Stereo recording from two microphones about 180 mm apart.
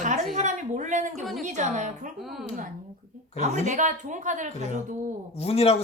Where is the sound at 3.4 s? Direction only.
45° right (ahead or behind).